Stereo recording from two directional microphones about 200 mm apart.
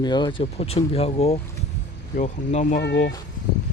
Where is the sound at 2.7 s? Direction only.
60° left (ahead or behind).